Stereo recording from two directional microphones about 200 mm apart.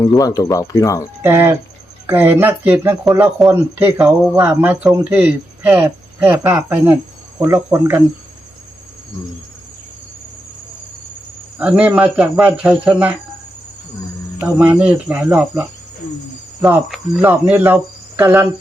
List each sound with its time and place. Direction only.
0.2 s speech: 15° left (ahead or behind)
1.2 s speech: 10° right (ahead or behind)
11.6 s speech: 5° right (ahead or behind)
14.4 s speech: 5° right (ahead or behind)